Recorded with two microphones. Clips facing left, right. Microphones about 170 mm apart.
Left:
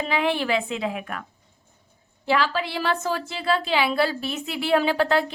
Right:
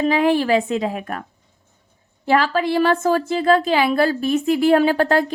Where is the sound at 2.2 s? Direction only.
45° right (ahead or behind).